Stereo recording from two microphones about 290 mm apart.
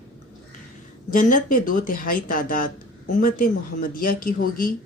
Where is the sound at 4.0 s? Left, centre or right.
Left.